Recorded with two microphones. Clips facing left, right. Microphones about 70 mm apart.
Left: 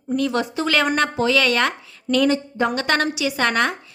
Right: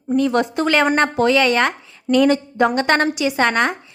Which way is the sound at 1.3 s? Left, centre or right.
Right.